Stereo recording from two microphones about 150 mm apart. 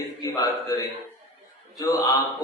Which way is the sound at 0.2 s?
25° left (ahead or behind).